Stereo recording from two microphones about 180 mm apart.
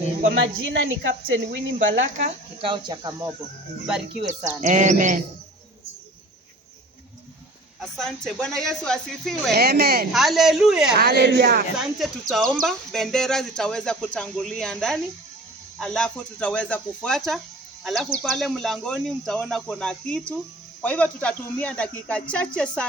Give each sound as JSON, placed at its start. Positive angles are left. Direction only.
{"t": 0.2, "sound": "speech", "side_deg": -90}
{"t": 1.9, "sound": "speech", "side_deg": -40}
{"t": 2.6, "sound": "speech", "side_deg": -25}
{"t": 4.2, "sound": "speech", "side_deg": -40}
{"t": 7.8, "sound": "speech", "side_deg": 0}
{"t": 9.5, "sound": "speech", "side_deg": -60}
{"t": 10.1, "sound": "speech", "side_deg": 0}
{"t": 10.9, "sound": "speech", "side_deg": -65}
{"t": 11.8, "sound": "speech", "side_deg": 0}